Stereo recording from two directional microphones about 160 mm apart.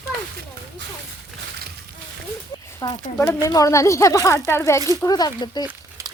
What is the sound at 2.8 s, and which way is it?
Speech, 25° left (ahead or behind).